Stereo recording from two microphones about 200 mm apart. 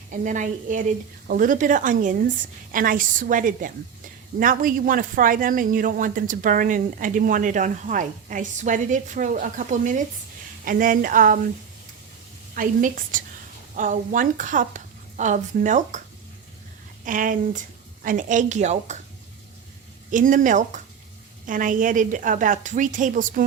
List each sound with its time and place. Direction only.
0.1 s a woman's voice: 40° right (ahead or behind)
12.5 s a woman's voice: 40° right (ahead or behind)
17.1 s speech: 40° right (ahead or behind)
20.1 s speech: 40° right (ahead or behind)